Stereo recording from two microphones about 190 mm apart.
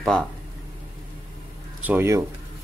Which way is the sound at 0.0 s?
5° left (ahead or behind).